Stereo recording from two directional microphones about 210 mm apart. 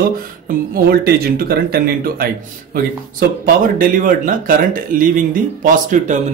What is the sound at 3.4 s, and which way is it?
Speech, 40° right (ahead or behind).